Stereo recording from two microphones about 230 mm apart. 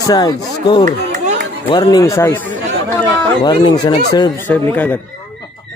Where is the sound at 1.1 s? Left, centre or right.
Right.